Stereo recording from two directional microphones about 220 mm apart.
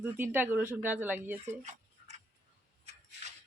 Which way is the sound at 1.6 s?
30° right (ahead or behind).